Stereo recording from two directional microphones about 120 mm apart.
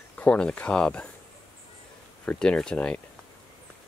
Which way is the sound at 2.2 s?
5° left (ahead or behind).